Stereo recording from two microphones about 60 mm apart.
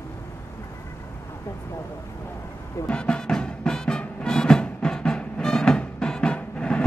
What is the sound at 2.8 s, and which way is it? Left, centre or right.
Music, centre.